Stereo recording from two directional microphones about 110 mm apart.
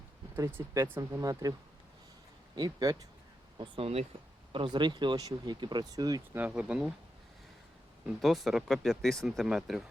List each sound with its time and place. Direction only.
0.3 s speech: 25° right (ahead or behind)
1.2 s speech: 35° right (ahead or behind)
2.6 s speech: 40° right (ahead or behind)
3.8 s speech: 65° right (ahead or behind)
4.5 s speech: 45° right (ahead or behind)
6.3 s speech: 15° right (ahead or behind)
8.2 s speech: centre (ahead or behind)